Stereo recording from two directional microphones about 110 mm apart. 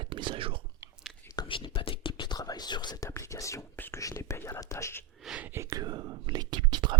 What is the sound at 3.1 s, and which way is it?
Whispering, 30° left (ahead or behind).